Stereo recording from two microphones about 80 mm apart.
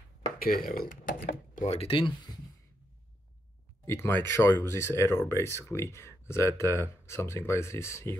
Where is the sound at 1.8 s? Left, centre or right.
Left.